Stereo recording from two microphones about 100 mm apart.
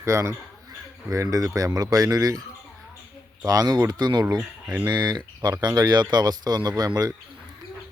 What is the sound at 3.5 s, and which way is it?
Speech, 40° right (ahead or behind).